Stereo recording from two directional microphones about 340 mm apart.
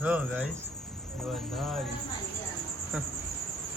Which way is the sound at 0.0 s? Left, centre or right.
Centre.